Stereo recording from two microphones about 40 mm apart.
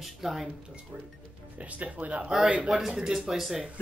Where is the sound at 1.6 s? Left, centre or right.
Right.